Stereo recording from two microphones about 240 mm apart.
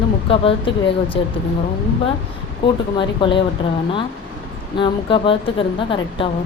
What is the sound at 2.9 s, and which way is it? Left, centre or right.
Speech, centre.